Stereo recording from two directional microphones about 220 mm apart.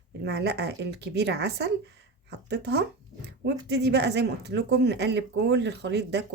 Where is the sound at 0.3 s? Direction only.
50° right (ahead or behind).